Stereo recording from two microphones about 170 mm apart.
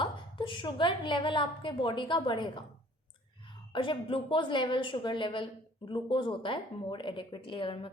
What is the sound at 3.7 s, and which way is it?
A woman's voice, 30° left (ahead or behind).